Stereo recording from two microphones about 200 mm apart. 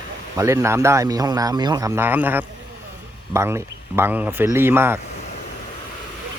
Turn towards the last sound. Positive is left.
turn(degrees=-10)  # may be behind; listen again after turning